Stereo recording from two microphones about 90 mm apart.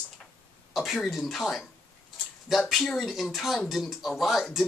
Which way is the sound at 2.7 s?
5° left (ahead or behind).